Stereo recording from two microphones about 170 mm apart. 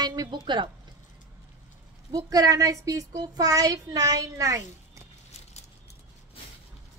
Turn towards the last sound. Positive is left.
turn(degrees=-20)  # may be behind; listen again after turning